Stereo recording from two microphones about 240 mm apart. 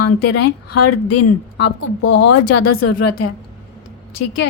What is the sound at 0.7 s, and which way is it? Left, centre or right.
Speech, left.